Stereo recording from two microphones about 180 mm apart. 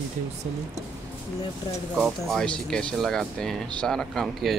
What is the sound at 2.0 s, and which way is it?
Speech, centre (ahead or behind).